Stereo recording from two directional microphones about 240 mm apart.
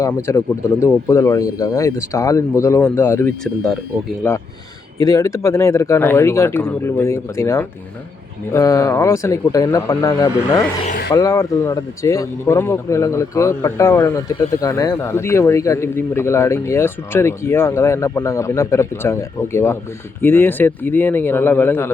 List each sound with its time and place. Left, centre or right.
0.0 s speech: centre
10.8 s speech: left
11.1 s speech: centre
20.2 s speech: centre